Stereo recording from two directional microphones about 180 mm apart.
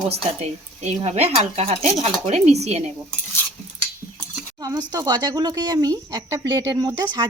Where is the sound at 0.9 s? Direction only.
35° right (ahead or behind).